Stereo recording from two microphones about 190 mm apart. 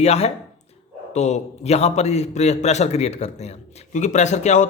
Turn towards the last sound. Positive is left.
turn(degrees=40)  # may be behind; listen again after turning